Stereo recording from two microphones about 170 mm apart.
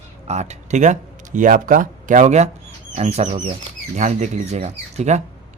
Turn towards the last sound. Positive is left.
turn(degrees=-40)  # may be behind; listen again after turning